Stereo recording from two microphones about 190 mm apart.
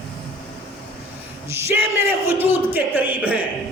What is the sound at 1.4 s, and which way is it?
Speech, 15° right (ahead or behind).